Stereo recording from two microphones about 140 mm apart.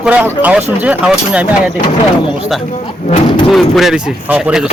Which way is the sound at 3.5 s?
Centre (ahead or behind).